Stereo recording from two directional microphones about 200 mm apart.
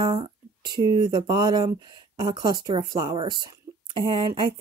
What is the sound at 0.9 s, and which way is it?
Speech, 20° right (ahead or behind).